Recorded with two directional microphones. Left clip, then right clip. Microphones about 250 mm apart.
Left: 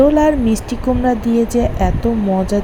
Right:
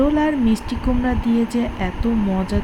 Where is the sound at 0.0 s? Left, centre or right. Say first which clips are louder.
Left 6 dB; centre.